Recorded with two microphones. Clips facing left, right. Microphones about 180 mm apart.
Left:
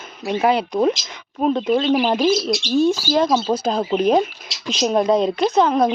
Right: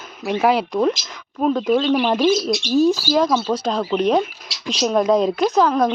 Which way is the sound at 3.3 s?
20° left (ahead or behind).